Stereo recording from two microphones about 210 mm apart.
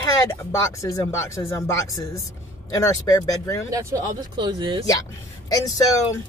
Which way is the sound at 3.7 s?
15° right (ahead or behind).